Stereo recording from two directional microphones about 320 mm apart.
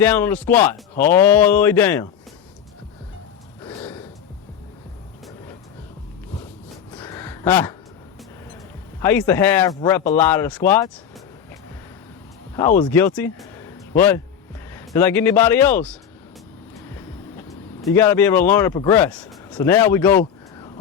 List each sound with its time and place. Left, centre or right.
0.0 s a man's voice: centre
3.6 s gasp: centre
6.9 s a sound: centre
9.0 s a man's voice: centre
12.5 s speech: centre
16.7 s vehicle: centre
19.5 s speech: centre